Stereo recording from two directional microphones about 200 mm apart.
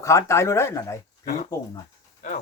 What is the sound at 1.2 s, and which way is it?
Speech, 45° left (ahead or behind).